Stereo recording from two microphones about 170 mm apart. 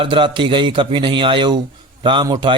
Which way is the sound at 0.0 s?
30° right (ahead or behind).